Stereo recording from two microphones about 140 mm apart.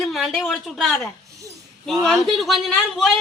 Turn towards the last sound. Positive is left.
turn(degrees=0)  # may be behind; listen again after turning